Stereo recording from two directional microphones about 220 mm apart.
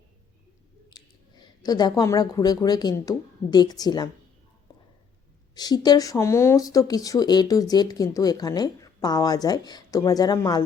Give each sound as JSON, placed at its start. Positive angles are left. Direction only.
{"t": 0.9, "sound": "speech", "side_deg": 15}
{"t": 4.7, "sound": "a sound", "side_deg": 20}
{"t": 5.5, "sound": "speech", "side_deg": 20}